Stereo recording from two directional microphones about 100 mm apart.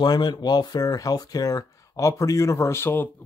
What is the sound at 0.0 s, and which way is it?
Speech, 45° left (ahead or behind).